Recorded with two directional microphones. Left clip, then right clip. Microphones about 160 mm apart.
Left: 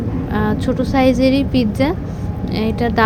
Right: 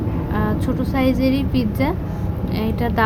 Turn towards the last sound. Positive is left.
turn(degrees=20)  # may be behind; listen again after turning